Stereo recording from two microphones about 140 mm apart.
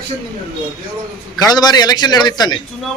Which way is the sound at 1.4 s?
30° left (ahead or behind).